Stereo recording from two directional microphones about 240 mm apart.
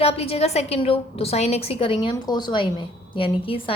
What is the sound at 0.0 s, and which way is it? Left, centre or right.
A woman's voice, left.